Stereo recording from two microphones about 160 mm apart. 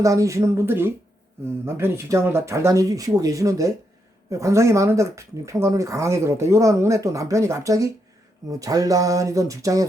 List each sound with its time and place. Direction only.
0.0 s speech: 20° right (ahead or behind)